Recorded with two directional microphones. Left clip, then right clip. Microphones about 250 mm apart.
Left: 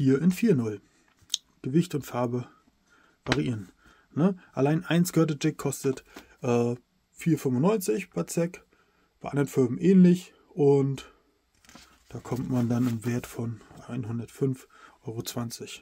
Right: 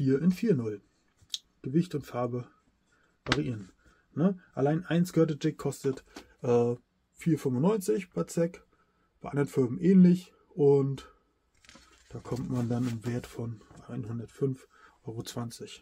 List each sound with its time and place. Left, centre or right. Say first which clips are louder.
0.0 s speech: left 4 dB; left
4.1 s speech: left 3 dB; left